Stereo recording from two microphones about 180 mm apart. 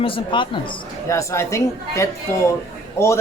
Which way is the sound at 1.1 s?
15° left (ahead or behind).